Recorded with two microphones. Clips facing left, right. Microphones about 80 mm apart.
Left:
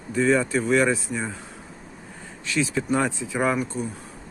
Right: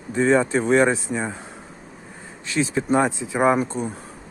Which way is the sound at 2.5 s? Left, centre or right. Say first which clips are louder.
Right 3 dB; right.